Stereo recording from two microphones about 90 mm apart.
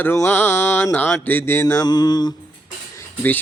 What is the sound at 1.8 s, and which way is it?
Mantra, 50° left (ahead or behind).